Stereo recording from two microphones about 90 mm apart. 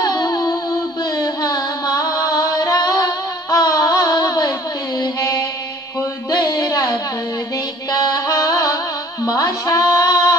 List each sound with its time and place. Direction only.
0.0 s a sound: 45° left (ahead or behind)
1.1 s music: 45° left (ahead or behind)
9.2 s bleat: 40° left (ahead or behind)